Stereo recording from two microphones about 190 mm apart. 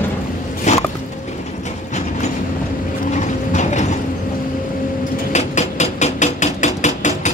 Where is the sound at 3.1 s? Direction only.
40° left (ahead or behind).